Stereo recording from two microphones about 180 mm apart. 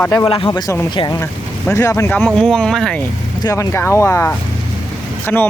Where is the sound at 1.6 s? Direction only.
15° left (ahead or behind).